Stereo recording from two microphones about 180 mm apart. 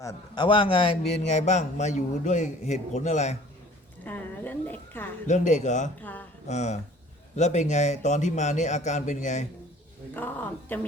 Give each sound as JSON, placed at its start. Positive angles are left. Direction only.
{"t": 0.0, "sound": "a man's voice", "side_deg": 20}
{"t": 4.0, "sound": "a sound", "side_deg": 10}
{"t": 5.3, "sound": "a man's voice", "side_deg": 40}
{"t": 6.0, "sound": "speech", "side_deg": 10}
{"t": 6.5, "sound": "a man's voice", "side_deg": 40}
{"t": 10.2, "sound": "speech", "side_deg": 10}